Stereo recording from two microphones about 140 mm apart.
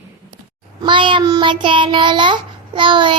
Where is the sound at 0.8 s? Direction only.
35° right (ahead or behind).